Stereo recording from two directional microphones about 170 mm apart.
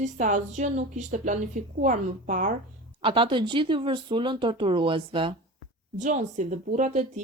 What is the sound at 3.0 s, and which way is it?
Speech, 30° right (ahead or behind).